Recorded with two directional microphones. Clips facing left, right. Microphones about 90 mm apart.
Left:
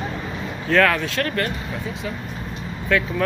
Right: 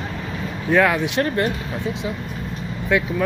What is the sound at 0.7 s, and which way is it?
Speech, 15° right (ahead or behind).